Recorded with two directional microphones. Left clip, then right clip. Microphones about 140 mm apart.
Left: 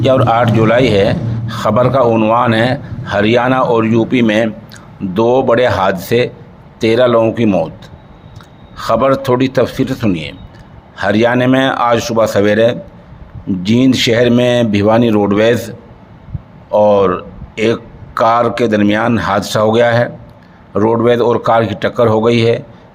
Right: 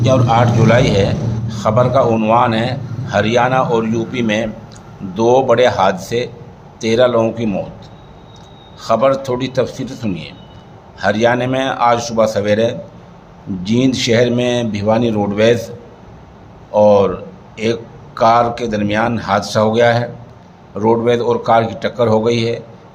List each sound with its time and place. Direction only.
0.0 s a man's voice: 55° left (ahead or behind)
8.8 s a man's voice: 45° left (ahead or behind)
16.7 s a man's voice: 45° left (ahead or behind)